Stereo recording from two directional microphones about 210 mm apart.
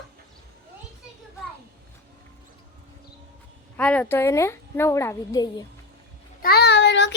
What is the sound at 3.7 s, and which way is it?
A child's voice, 10° left (ahead or behind).